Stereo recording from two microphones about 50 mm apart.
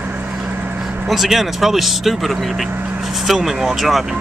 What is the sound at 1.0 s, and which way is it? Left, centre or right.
Speech, centre.